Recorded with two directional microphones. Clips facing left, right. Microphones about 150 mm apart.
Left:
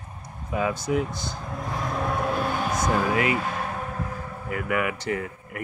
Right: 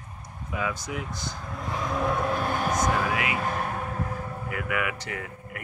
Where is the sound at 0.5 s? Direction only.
30° left (ahead or behind).